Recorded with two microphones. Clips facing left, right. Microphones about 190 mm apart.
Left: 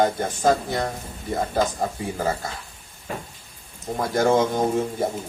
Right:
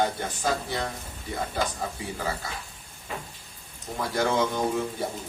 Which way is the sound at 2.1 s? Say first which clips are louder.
Left 7 dB; 45° left (ahead or behind).